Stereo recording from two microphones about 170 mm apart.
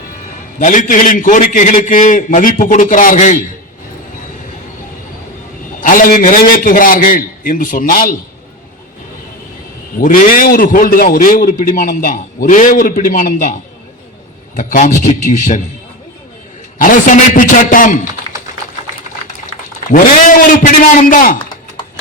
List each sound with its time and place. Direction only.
0.6 s a man's voice: 50° left (ahead or behind)
5.8 s a man's voice: 55° left (ahead or behind)
10.0 s a man's voice: 50° left (ahead or behind)
14.5 s a man's voice: 50° left (ahead or behind)
16.7 s a man's voice: 50° left (ahead or behind)
20.6 s a man's voice: 50° left (ahead or behind)